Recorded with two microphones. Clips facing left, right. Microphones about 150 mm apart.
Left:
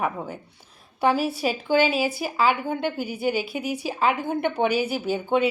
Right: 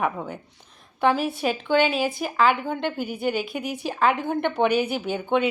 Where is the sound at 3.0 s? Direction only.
50° right (ahead or behind).